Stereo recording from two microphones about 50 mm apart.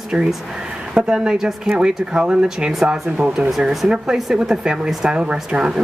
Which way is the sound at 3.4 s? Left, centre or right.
Centre.